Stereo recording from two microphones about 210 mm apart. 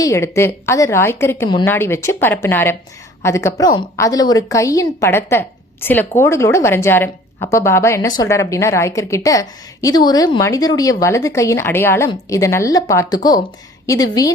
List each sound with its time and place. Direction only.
0.0 s a woman's voice: 15° left (ahead or behind)